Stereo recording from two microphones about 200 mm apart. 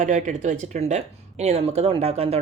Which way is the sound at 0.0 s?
40° right (ahead or behind).